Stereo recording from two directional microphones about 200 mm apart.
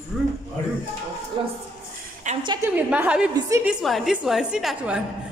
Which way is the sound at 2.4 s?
20° right (ahead or behind).